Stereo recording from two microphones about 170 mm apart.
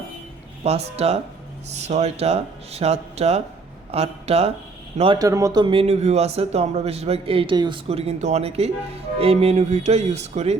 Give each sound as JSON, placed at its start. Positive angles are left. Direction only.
{"t": 0.6, "sound": "speech", "side_deg": -40}
{"t": 5.2, "sound": "speech", "side_deg": -20}
{"t": 5.7, "sound": "speech", "side_deg": -40}